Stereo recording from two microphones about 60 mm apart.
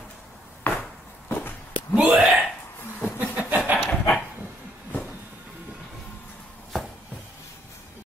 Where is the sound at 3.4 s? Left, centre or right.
Right.